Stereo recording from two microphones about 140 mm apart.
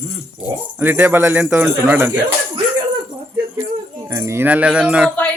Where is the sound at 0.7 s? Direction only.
15° right (ahead or behind).